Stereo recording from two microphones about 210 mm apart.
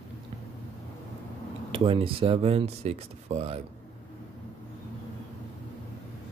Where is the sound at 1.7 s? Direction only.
25° right (ahead or behind).